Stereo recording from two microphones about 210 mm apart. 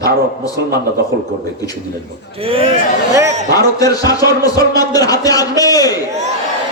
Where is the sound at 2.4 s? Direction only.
25° right (ahead or behind).